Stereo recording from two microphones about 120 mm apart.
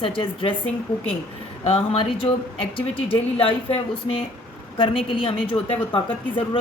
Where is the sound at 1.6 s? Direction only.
50° left (ahead or behind).